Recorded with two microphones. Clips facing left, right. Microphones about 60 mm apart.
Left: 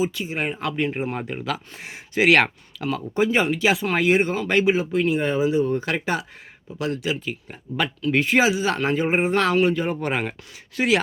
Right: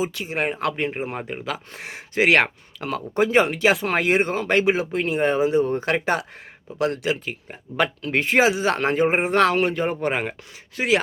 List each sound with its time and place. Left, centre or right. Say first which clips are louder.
0.0 s speech: even; right
0.9 s speech: left 1 dB; centre
1.7 s speech: right 2 dB; right
2.1 s speech: left 1 dB; right
2.8 s speech: even; right
10.0 s speech: right 1 dB; right